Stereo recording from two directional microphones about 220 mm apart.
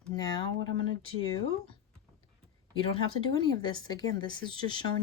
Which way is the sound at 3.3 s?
20° left (ahead or behind).